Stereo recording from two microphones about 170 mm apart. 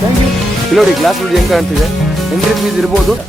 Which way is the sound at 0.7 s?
Centre (ahead or behind).